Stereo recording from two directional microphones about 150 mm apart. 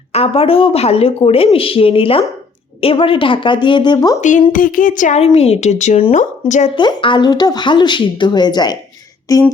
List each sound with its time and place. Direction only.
0.1 s speech: 40° left (ahead or behind)
4.2 s a woman's voice: 55° left (ahead or behind)
6.7 s speech: 35° left (ahead or behind)